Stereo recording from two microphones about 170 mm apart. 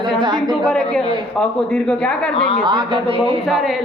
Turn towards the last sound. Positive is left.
turn(degrees=0)  # may be behind; listen again after turning